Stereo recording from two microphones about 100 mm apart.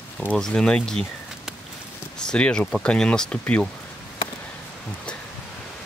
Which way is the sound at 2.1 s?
10° left (ahead or behind).